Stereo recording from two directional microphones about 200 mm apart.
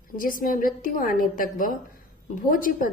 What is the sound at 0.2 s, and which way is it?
A woman's voice, 45° left (ahead or behind).